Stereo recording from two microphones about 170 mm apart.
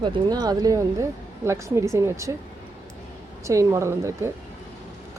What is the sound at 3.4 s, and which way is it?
Speech, 15° right (ahead or behind).